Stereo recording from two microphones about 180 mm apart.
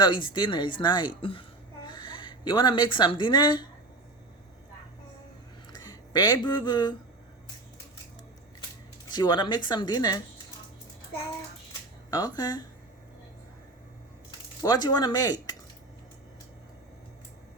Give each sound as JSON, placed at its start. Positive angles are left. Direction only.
{"t": 0.0, "sound": "a woman's voice", "side_deg": 25}
{"t": 5.7, "sound": "speech", "side_deg": 25}
{"t": 9.1, "sound": "speech", "side_deg": 25}
{"t": 12.1, "sound": "speech", "side_deg": 20}
{"t": 14.3, "sound": "speech", "side_deg": 20}